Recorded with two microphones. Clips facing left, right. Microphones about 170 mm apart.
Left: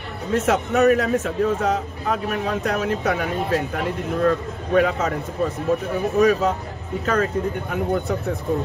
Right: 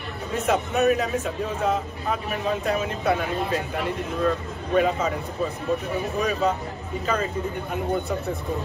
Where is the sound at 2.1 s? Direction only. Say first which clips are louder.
Left 3 dB; 60° left (ahead or behind).